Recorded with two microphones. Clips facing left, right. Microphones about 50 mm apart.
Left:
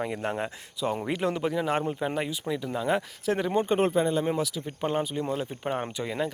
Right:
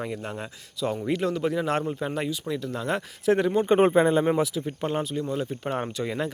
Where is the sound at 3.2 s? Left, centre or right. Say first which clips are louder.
Right 8 dB; centre.